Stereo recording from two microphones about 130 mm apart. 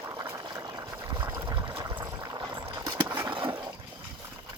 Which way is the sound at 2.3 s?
35° right (ahead or behind).